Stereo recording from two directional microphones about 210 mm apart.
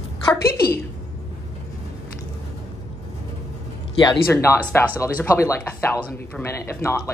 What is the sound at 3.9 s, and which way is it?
Speech, 15° left (ahead or behind).